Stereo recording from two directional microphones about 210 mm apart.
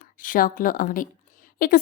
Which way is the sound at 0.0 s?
40° left (ahead or behind).